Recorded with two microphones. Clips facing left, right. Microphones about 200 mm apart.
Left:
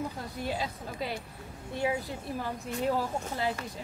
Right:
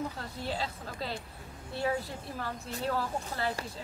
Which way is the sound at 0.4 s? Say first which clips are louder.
Left 2 dB; 15° left (ahead or behind).